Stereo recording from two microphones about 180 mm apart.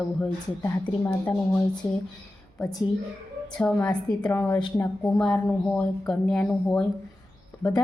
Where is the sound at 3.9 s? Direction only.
5° left (ahead or behind).